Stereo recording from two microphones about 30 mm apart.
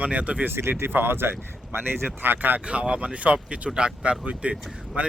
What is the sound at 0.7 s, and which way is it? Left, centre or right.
Speech, right.